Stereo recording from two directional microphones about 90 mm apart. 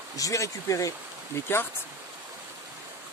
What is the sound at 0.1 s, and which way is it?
Speech, 40° left (ahead or behind).